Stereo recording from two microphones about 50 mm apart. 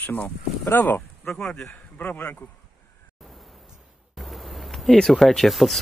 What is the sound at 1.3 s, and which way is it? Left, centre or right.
Speech, centre.